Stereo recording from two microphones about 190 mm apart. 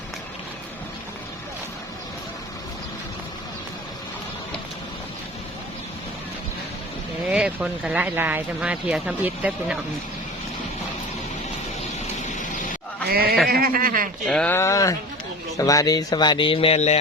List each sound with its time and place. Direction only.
7.3 s speech: 5° right (ahead or behind)
13.1 s a sound: 50° right (ahead or behind)
13.5 s speech: 50° right (ahead or behind)
14.3 s speech: 5° left (ahead or behind); by 17.0 s 35° left (ahead or behind)